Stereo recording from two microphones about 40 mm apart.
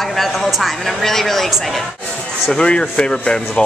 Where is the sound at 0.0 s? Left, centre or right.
Centre.